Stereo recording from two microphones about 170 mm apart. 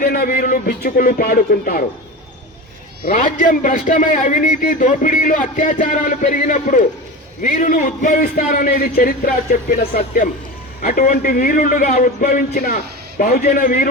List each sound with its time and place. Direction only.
0.0 s a man's voice: 60° left (ahead or behind)
3.1 s a man's voice: 50° left (ahead or behind)